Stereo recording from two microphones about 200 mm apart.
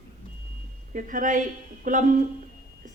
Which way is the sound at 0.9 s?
40° right (ahead or behind).